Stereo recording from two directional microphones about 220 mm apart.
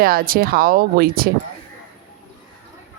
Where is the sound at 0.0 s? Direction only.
40° right (ahead or behind).